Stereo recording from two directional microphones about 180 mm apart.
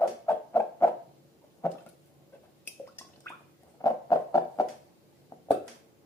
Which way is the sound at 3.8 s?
20° left (ahead or behind).